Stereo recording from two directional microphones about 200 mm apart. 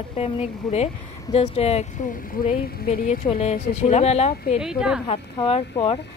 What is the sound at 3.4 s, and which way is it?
Speech, 35° left (ahead or behind).